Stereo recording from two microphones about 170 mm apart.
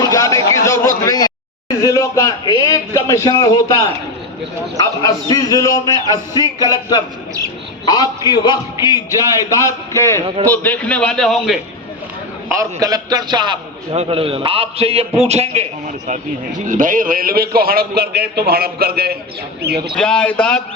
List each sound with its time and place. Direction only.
0.0 s a sound: 20° left (ahead or behind)
0.6 s a man's voice: 20° left (ahead or behind)
7.9 s a man's voice: 25° left (ahead or behind); by 11.6 s centre (ahead or behind)
12.5 s a man's voice: 20° right (ahead or behind)
13.9 s a man's voice: 35° right (ahead or behind)
16.6 s a man's voice: 50° right (ahead or behind); by 19.9 s 70° right (ahead or behind)
20.0 s speech: 5° left (ahead or behind)